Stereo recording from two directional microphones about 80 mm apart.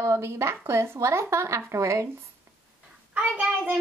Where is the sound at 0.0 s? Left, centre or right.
Right.